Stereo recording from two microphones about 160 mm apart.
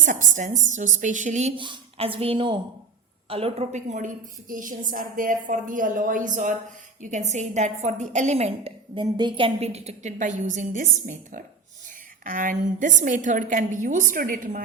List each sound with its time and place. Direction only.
0.0 s a woman's voice: 55° right (ahead or behind)
1.5 s a woman's voice: 30° right (ahead or behind); by 14.6 s 55° right (ahead or behind)